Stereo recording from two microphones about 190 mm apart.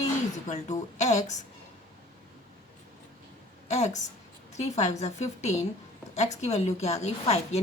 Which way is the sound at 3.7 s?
35° left (ahead or behind).